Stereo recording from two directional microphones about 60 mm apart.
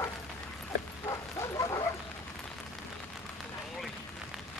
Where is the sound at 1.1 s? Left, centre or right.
Left.